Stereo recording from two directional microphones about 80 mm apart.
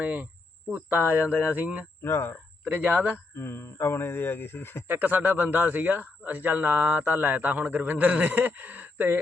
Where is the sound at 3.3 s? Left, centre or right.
Left.